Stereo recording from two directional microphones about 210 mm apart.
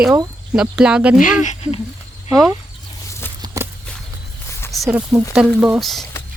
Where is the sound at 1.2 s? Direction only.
40° left (ahead or behind).